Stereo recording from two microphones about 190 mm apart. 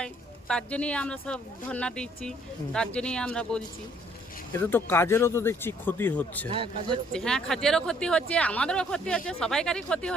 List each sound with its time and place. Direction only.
0.0 s speech: 5° left (ahead or behind)
6.5 s speech: 30° right (ahead or behind)
7.1 s speech: 5° left (ahead or behind)